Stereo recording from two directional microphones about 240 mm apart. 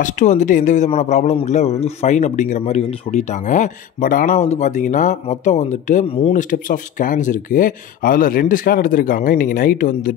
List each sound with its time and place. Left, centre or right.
0.0 s speech: left